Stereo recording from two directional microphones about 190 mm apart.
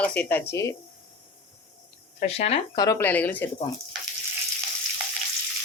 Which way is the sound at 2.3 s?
35° left (ahead or behind).